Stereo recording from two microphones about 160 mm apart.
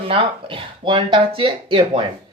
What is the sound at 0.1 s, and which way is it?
Speech, 35° right (ahead or behind).